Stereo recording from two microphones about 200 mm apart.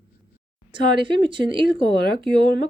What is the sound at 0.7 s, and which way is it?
Speech, 25° right (ahead or behind).